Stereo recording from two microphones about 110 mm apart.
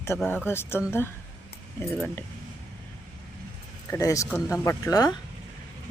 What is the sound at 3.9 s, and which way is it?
Speech, 30° left (ahead or behind).